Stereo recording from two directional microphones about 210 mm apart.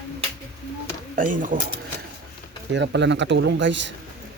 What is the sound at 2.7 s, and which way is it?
Speech, 55° right (ahead or behind).